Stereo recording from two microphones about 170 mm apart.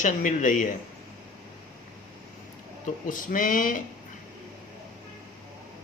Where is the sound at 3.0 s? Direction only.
50° left (ahead or behind).